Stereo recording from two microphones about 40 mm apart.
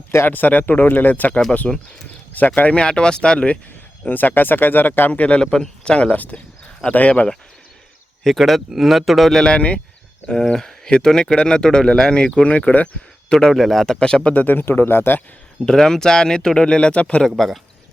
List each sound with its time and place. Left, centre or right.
0.3 s speech: left
1.7 s speech: centre
4.1 s speech: left
5.4 s speech: centre
5.8 s speech: left
8.2 s speech: centre
9.3 s speech: centre
10.2 s speech: centre
12.4 s speech: left
13.5 s speech: centre
14.3 s speech: left
14.6 s speech: left
15.6 s speech: centre; by 17.2 s left
17.2 s speech: centre